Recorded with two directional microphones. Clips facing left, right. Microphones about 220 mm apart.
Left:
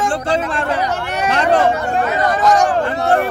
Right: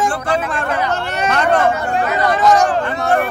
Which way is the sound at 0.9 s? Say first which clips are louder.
Right 1 dB; 15° left (ahead or behind).